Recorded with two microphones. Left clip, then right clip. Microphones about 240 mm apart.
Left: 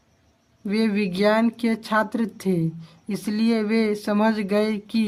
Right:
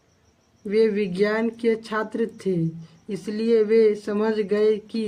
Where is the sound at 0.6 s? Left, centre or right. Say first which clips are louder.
Right 4 dB; left.